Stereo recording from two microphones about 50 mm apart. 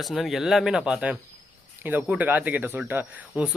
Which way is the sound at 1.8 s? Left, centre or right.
Right.